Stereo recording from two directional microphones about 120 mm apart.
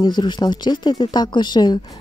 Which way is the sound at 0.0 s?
40° left (ahead or behind).